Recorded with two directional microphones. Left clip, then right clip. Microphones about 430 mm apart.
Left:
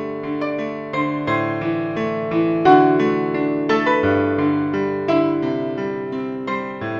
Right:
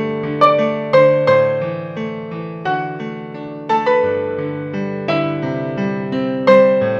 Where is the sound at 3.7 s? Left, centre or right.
Left.